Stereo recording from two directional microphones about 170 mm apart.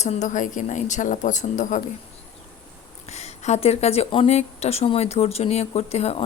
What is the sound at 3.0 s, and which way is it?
Speech, 40° left (ahead or behind).